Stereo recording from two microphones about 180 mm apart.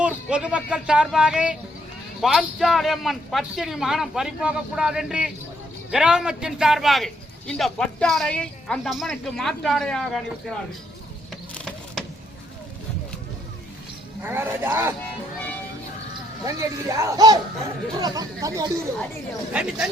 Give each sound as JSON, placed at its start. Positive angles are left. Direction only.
{"t": 0.0, "sound": "speech", "side_deg": -5}
{"t": 11.5, "sound": "a sound", "side_deg": 5}
{"t": 14.2, "sound": "speech", "side_deg": -10}
{"t": 16.4, "sound": "speech", "side_deg": -15}
{"t": 19.5, "sound": "speech", "side_deg": -5}